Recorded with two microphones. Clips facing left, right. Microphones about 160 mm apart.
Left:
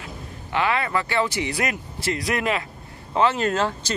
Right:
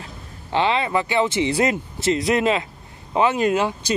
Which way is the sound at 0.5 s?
25° right (ahead or behind).